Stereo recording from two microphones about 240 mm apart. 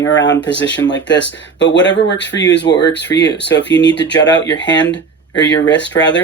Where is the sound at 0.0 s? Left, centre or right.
Left.